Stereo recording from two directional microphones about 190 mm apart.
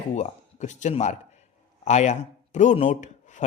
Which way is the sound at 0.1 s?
40° left (ahead or behind).